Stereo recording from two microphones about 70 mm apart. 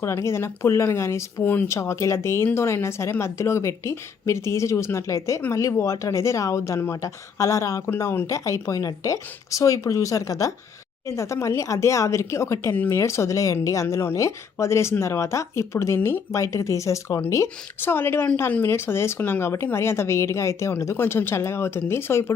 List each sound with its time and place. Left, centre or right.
0.0 s a woman's voice: left
7.9 s speech: left
13.8 s speech: left
17.7 s a woman's voice: left